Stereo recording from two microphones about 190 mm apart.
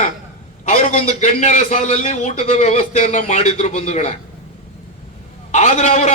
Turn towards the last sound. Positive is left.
turn(degrees=35)  # may be behind; listen again after turning